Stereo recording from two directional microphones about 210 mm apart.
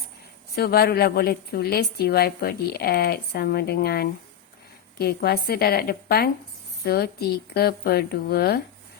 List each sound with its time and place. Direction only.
0.5 s a woman's voice: 50° left (ahead or behind)